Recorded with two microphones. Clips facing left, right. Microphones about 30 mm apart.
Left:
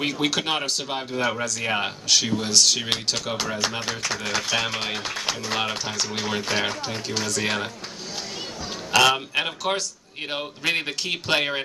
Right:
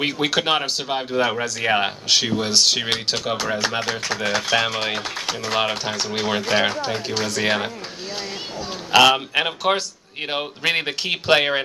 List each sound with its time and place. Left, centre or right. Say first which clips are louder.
0.0 s speech: right 3 dB; centre
8.9 s speech: right 4 dB; centre